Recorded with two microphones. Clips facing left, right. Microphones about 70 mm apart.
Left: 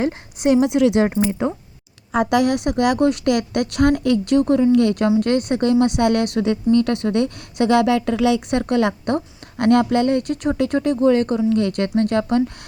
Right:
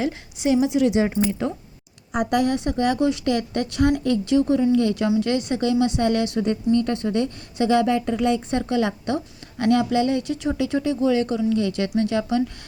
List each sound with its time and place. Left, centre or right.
0.0 s a woman's voice: left
1.1 s speech: left
2.1 s a woman's voice: left